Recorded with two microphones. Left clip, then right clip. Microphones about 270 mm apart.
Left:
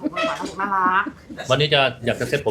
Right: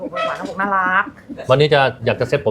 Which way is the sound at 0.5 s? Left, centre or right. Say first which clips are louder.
Right 3 dB; right.